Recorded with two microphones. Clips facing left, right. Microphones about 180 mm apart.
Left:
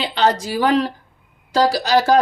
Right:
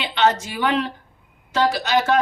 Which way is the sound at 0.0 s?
35° left (ahead or behind).